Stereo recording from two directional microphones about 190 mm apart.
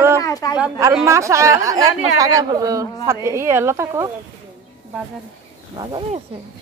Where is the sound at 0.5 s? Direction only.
5° right (ahead or behind).